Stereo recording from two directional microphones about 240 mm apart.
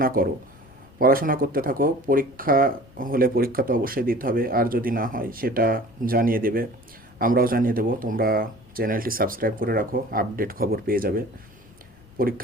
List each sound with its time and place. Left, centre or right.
0.0 s speech: right
12.2 s speech: right